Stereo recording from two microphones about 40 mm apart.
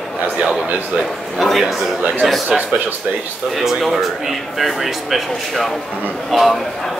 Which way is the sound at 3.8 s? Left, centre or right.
Centre.